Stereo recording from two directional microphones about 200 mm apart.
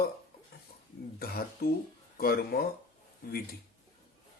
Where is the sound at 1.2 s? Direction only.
50° left (ahead or behind).